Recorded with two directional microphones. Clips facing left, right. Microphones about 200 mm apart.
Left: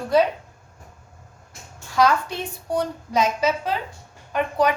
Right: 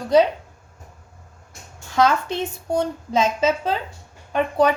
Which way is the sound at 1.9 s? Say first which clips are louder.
Right 1 dB; 25° right (ahead or behind).